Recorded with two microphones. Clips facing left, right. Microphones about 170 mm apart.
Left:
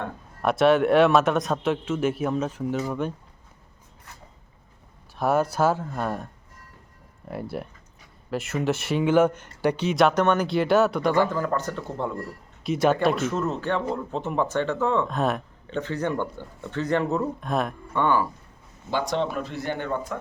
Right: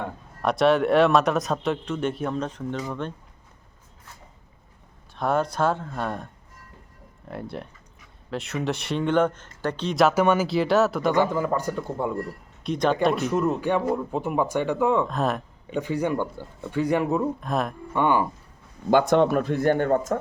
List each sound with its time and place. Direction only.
0.4 s speech: centre (ahead or behind)
5.1 s speech: 5° left (ahead or behind)
7.3 s speech: 5° left (ahead or behind)
11.1 s speech: 15° right (ahead or behind)
12.6 s speech: 5° left (ahead or behind)
13.3 s speech: 15° right (ahead or behind)
15.0 s speech: centre (ahead or behind)
15.7 s speech: 10° right (ahead or behind)
17.4 s speech: centre (ahead or behind)
17.9 s speech: 15° right (ahead or behind)
18.9 s speech: 55° right (ahead or behind)